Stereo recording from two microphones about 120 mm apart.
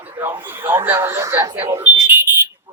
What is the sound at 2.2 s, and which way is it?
Smoke detector, 20° right (ahead or behind).